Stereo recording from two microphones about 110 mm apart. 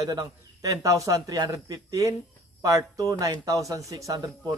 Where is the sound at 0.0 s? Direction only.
35° right (ahead or behind).